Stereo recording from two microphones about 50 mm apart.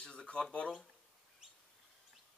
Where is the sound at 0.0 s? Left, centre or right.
Centre.